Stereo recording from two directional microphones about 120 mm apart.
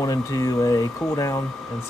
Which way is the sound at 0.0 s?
30° left (ahead or behind).